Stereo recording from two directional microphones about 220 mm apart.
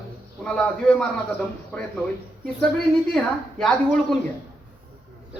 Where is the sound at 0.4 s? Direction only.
5° left (ahead or behind).